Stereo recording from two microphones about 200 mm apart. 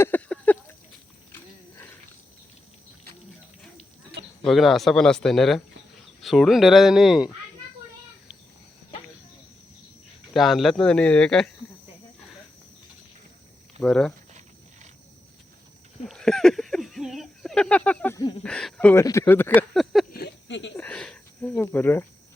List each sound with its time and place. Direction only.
0.0 s a sound: 10° left (ahead or behind)
4.4 s speech: centre (ahead or behind)
10.3 s speech: centre (ahead or behind)
13.7 s speech: 5° left (ahead or behind)
16.0 s a sound: centre (ahead or behind)
18.4 s speech: 5° left (ahead or behind)
19.5 s speech: centre (ahead or behind)
20.1 s a sound: 60° left (ahead or behind)
20.7 s speech: 5° left (ahead or behind)